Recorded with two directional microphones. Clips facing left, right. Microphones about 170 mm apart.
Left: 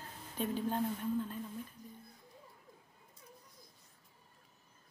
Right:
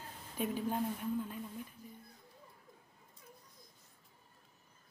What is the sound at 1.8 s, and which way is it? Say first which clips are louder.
Speech: even; 15° left (ahead or behind).